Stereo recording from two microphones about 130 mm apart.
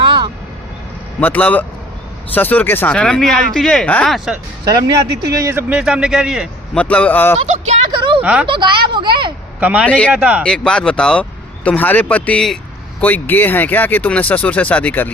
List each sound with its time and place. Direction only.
0.0 s vehicle: 35° right (ahead or behind)
1.2 s speech: 10° left (ahead or behind)
4.6 s speech: 35° right (ahead or behind)
5.7 s a man's voice: 5° right (ahead or behind)
6.7 s speech: 10° left (ahead or behind)
7.4 s speech: 65° right (ahead or behind)
8.2 s speech: 10° right (ahead or behind)
8.4 s a woman's voice: 40° right (ahead or behind)
9.6 s speech: 10° right (ahead or behind)
10.4 s speech: 5° left (ahead or behind)